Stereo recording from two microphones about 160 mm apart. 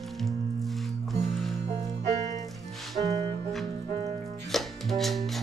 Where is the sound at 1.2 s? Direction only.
Centre (ahead or behind).